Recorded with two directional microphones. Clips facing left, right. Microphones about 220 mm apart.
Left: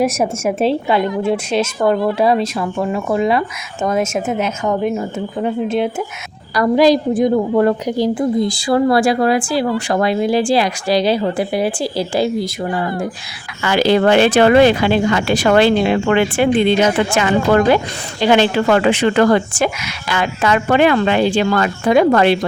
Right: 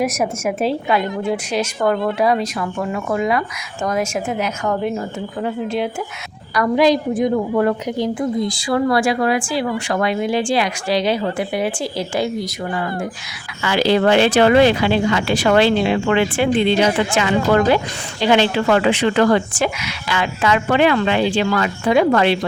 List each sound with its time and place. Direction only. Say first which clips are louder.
0.0 s a woman's voice: left 3 dB; 30° left (ahead or behind)
6.5 s a woman's voice: left 3 dB; 35° left (ahead or behind)
13.6 s speech: left 2 dB; 50° left (ahead or behind)